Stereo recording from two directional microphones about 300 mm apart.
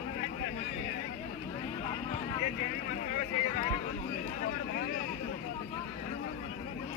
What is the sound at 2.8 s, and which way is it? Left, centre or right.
Boat, left.